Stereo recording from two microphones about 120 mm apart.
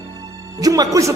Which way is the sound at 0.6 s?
30° right (ahead or behind).